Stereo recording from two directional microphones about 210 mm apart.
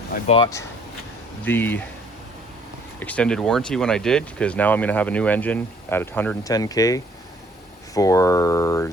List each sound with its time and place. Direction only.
0.3 s speech: 20° left (ahead or behind)
1.5 s speech: 10° left (ahead or behind)
3.0 s speech: 5° left (ahead or behind)